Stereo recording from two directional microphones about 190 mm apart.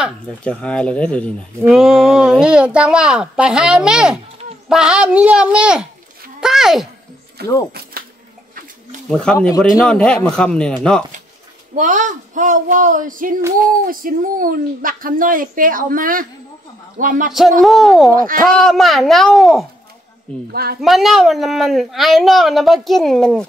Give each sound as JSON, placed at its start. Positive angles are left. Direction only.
{"t": 0.0, "sound": "speech", "side_deg": 5}
{"t": 6.4, "sound": "a sound", "side_deg": 0}
{"t": 9.2, "sound": "speech", "side_deg": 5}
{"t": 11.7, "sound": "speech", "side_deg": -40}
{"t": 17.3, "sound": "speech", "side_deg": 0}
{"t": 18.1, "sound": "speech", "side_deg": -45}
{"t": 18.6, "sound": "speech", "side_deg": 0}
{"t": 20.8, "sound": "speech", "side_deg": 0}